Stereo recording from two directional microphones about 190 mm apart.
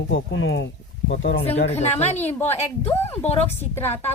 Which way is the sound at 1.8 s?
35° left (ahead or behind).